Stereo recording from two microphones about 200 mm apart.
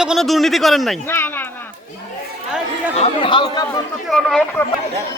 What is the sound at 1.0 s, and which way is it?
Speech, 10° left (ahead or behind).